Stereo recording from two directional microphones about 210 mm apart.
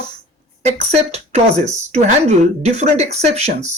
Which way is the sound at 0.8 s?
30° right (ahead or behind).